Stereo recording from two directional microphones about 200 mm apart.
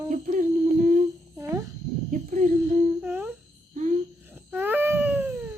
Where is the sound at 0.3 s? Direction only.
40° right (ahead or behind).